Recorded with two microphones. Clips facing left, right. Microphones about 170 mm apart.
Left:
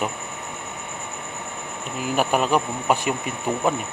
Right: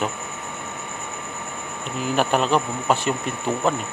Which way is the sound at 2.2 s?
10° left (ahead or behind).